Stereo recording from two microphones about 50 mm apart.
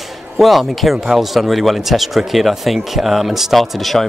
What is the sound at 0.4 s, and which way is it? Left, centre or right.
Speech, centre.